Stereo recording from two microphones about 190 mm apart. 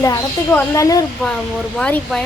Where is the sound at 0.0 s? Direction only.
15° left (ahead or behind).